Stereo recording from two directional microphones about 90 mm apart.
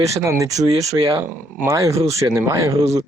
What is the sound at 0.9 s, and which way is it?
Speech, 70° right (ahead or behind).